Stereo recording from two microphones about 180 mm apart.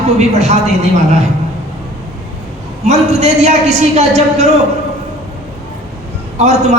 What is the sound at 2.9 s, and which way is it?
A man's voice, 40° right (ahead or behind).